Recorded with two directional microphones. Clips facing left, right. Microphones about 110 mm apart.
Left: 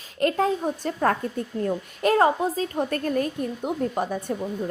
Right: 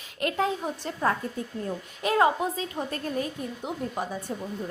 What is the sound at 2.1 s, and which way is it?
Speech, 40° left (ahead or behind).